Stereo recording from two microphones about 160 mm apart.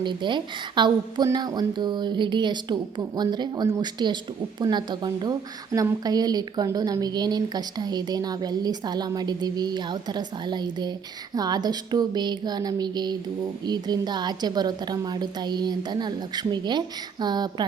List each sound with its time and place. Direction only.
0.0 s a woman's voice: 30° right (ahead or behind)